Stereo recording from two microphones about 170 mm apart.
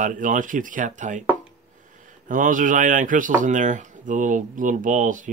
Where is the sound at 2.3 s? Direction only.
50° right (ahead or behind).